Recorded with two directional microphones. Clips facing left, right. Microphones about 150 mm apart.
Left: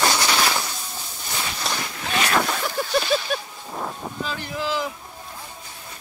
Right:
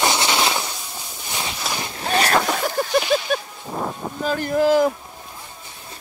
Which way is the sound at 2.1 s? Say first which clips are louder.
Right 3 dB; 35° right (ahead or behind).